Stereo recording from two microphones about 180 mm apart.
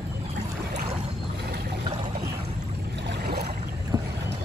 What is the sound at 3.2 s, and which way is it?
Boat, 60° right (ahead or behind).